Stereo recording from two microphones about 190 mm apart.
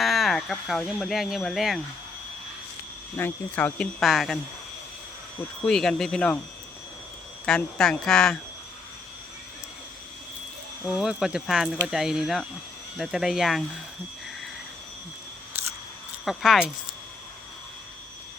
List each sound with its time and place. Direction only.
0.0 s speech: centre (ahead or behind)
3.2 s speech: 10° left (ahead or behind)
5.6 s speech: 5° left (ahead or behind)
7.4 s speech: centre (ahead or behind)
10.8 s speech: 5° right (ahead or behind)
16.2 s speech: centre (ahead or behind)